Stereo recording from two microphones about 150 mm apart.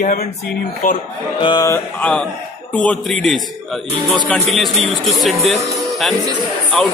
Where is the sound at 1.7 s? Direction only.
10° left (ahead or behind).